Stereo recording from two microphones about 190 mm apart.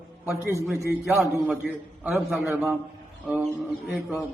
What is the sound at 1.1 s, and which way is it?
A man's voice, 5° right (ahead or behind).